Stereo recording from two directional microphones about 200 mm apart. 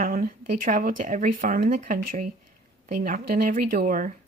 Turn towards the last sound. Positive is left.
turn(degrees=-45)  # may be behind; listen again after turning